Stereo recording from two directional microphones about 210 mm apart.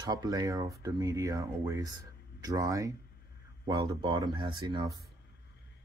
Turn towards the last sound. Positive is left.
turn(degrees=-20)  # may be behind; listen again after turning